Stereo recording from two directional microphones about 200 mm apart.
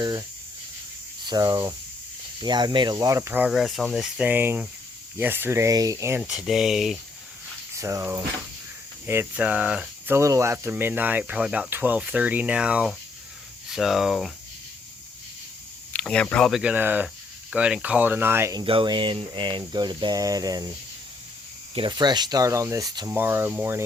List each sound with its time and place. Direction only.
0.0 s cricket: 20° right (ahead or behind)
1.2 s speech: 20° right (ahead or behind)
6.2 s speech: centre (ahead or behind)
7.8 s speech: 15° right (ahead or behind)
15.9 s speech: 5° left (ahead or behind); by 18.6 s 15° right (ahead or behind)
18.6 s cricket: 25° right (ahead or behind)
21.8 s speech: 20° right (ahead or behind)